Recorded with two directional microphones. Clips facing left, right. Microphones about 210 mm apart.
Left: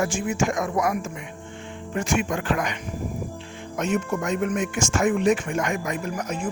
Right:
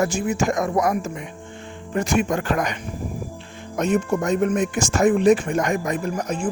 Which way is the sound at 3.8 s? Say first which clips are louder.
Right 4 dB; 35° right (ahead or behind).